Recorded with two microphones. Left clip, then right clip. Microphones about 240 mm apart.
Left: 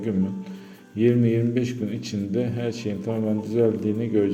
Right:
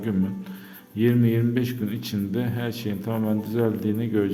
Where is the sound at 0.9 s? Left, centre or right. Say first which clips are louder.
Left 2 dB; centre.